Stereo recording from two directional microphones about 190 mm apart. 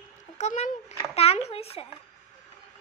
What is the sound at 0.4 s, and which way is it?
A child's voice, 35° left (ahead or behind).